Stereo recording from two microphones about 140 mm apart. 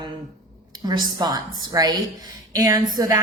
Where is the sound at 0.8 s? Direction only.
30° right (ahead or behind).